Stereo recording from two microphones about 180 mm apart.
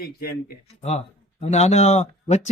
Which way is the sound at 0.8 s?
35° left (ahead or behind).